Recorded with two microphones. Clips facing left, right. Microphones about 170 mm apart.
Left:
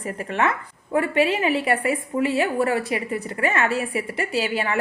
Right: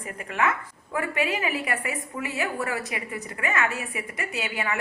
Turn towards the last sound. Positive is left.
turn(degrees=30)  # may be behind; listen again after turning